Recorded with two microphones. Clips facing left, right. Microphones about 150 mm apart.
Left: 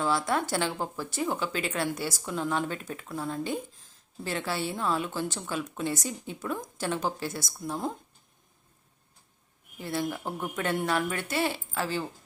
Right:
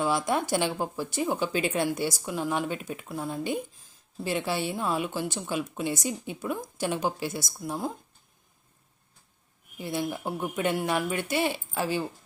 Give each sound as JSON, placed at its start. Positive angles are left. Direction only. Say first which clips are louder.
{"t": 0.0, "sound": "a woman's voice", "louder": "right 1 dB", "side_deg": -15}
{"t": 9.7, "sound": "a woman's voice", "louder": "right 1 dB", "side_deg": -15}